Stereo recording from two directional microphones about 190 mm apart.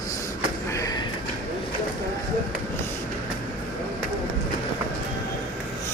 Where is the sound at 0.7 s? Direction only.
15° left (ahead or behind).